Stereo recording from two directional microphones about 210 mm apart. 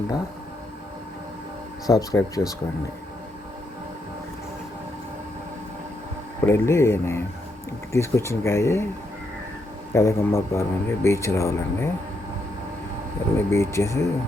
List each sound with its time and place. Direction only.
1.9 s a man's voice: 15° left (ahead or behind)
6.4 s a man's voice: 15° left (ahead or behind)
9.9 s a man's voice: 15° left (ahead or behind)
13.3 s a man's voice: 10° left (ahead or behind)